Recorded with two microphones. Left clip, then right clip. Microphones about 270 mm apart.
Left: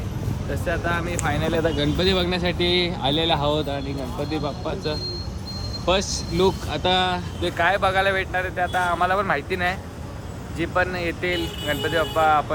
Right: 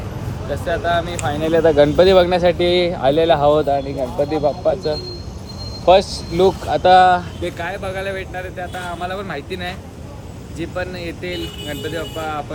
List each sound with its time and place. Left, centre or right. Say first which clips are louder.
0.5 s speech: right 7 dB; centre
1.6 s speech: right 11 dB; centre
2.0 s speech: right 10 dB; centre